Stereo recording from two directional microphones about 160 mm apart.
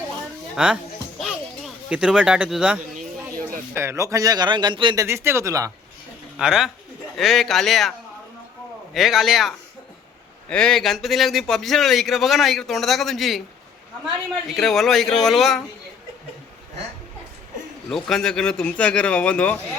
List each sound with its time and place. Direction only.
0.5 s speech: 5° right (ahead or behind)
1.2 s a sound: 5° right (ahead or behind)
3.8 s a man's voice: 20° right (ahead or behind)
5.0 s speech: 15° right (ahead or behind)
6.4 s a man's voice: 5° right (ahead or behind)
17.8 s a man's voice: 5° left (ahead or behind)